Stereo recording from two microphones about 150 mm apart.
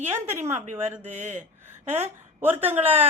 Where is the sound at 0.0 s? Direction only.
15° right (ahead or behind).